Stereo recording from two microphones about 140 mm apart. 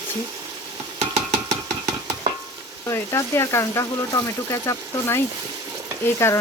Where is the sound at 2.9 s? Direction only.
20° left (ahead or behind).